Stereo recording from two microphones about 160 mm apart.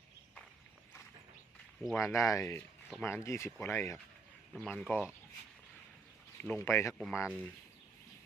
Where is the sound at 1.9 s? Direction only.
20° left (ahead or behind).